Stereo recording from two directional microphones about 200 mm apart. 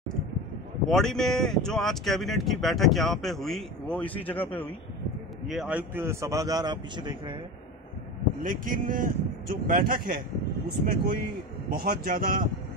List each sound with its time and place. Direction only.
0.8 s speech: centre (ahead or behind)
5.5 s a man's voice: 5° right (ahead or behind); by 7.3 s 25° right (ahead or behind)
8.4 s speech: 45° right (ahead or behind)